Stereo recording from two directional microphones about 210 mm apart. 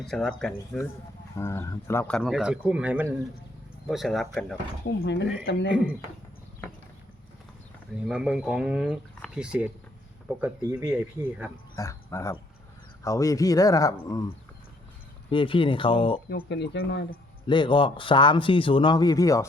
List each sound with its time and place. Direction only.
0.0 s speech: centre (ahead or behind)
1.4 s speech: 15° left (ahead or behind)
4.9 s speech: 55° left (ahead or behind)
7.9 s speech: 5° right (ahead or behind)
11.8 s speech: 15° left (ahead or behind)
15.3 s speech: 25° left (ahead or behind)
16.3 s speech: 55° left (ahead or behind)
17.4 s speech: 20° left (ahead or behind)